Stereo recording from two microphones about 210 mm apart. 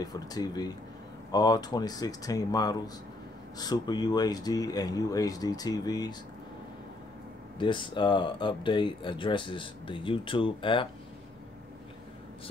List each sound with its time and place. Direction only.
0.0 s speech: 20° left (ahead or behind)
7.5 s speech: 25° left (ahead or behind)